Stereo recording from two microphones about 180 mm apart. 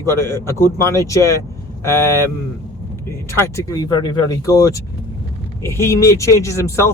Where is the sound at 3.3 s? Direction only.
20° left (ahead or behind).